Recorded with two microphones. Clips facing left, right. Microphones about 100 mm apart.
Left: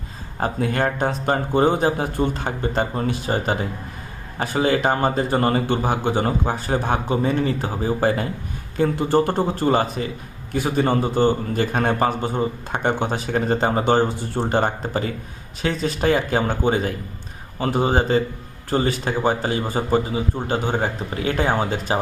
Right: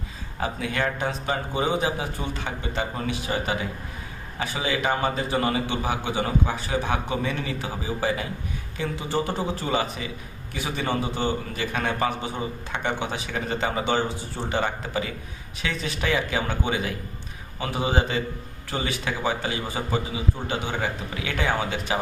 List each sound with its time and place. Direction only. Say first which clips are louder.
0.3 s a man's voice: left 5 dB; 45° left (ahead or behind)